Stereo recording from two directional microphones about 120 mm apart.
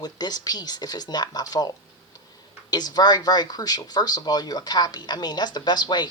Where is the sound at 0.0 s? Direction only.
35° left (ahead or behind).